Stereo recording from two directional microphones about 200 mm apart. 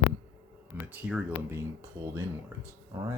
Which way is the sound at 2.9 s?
20° right (ahead or behind).